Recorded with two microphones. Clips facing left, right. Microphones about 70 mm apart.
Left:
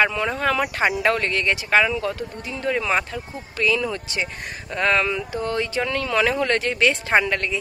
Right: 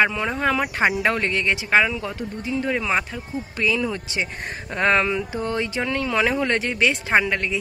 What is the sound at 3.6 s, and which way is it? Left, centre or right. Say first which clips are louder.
Speech: left 1 dB; centre.